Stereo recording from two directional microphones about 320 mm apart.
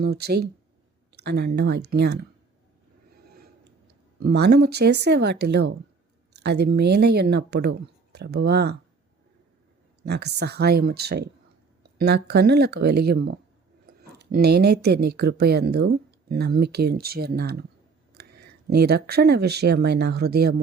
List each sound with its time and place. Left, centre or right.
0.0 s speech: right
4.2 s speech: right
10.1 s speech: right